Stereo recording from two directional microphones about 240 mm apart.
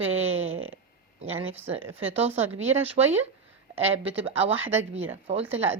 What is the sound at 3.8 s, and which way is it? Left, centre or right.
Speech, right.